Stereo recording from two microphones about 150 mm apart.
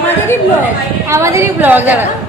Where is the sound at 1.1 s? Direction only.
20° right (ahead or behind).